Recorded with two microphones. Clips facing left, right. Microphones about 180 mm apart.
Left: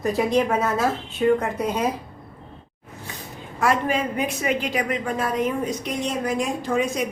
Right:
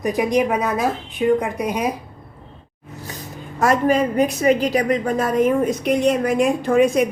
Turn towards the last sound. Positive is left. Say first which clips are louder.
# right 8 dB
turn(degrees=-60)  # may be behind; listen again after turning